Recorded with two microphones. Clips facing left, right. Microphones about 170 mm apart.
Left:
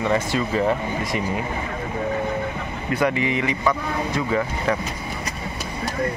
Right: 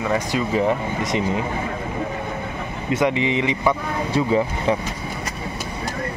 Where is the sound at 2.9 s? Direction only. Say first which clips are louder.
Right 2 dB; 20° right (ahead or behind).